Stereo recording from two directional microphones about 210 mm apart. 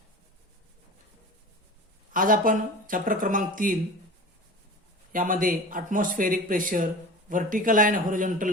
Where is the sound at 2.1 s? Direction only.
40° right (ahead or behind).